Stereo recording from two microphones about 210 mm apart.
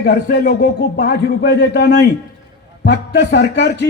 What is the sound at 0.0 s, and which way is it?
A man's voice, 50° left (ahead or behind).